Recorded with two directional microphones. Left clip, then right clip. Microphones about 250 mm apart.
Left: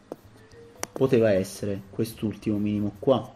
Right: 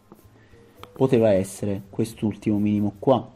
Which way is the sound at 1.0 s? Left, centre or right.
Centre.